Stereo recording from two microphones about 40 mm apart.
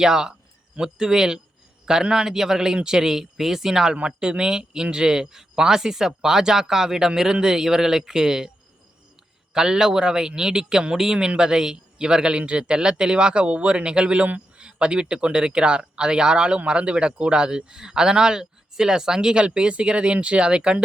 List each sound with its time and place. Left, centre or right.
0.0 s speech: centre
9.5 s speech: centre